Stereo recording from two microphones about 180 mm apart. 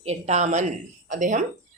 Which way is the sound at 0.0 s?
40° right (ahead or behind).